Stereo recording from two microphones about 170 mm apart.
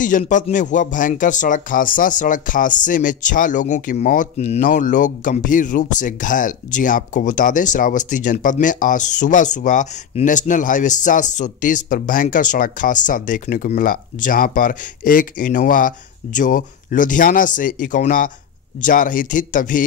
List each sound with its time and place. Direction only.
0.0 s speech: 50° left (ahead or behind)